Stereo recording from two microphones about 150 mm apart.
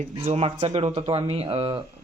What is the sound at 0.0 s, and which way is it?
A man's voice, 45° right (ahead or behind).